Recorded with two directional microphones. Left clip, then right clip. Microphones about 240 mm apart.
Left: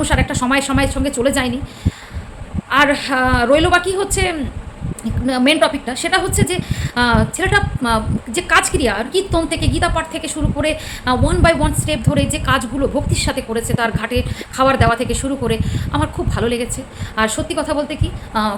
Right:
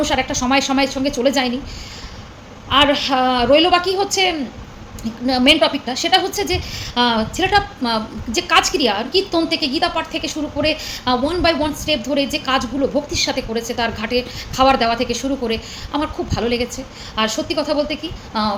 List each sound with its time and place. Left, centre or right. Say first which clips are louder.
0.0 s a woman's voice: even; centre
2.6 s a woman's voice: even; centre